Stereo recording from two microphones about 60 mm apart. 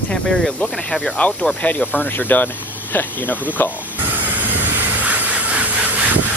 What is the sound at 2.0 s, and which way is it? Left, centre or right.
Speech, left.